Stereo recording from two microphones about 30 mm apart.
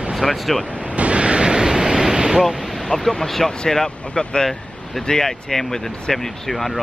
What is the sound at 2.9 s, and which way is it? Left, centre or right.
Speech, centre.